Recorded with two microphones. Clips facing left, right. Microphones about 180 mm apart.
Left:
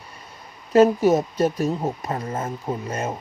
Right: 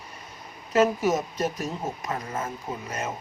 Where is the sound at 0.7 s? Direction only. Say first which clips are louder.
Left 6 dB; 30° left (ahead or behind).